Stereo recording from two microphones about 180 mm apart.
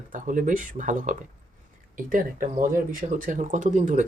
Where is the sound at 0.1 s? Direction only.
45° right (ahead or behind).